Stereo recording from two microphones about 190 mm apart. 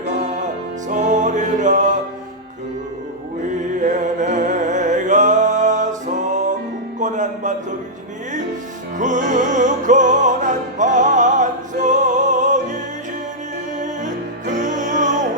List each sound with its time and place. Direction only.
0.9 s music: 40° right (ahead or behind)
3.8 s music: 40° right (ahead or behind)
9.0 s music: 40° right (ahead or behind)
13.8 s music: 40° right (ahead or behind)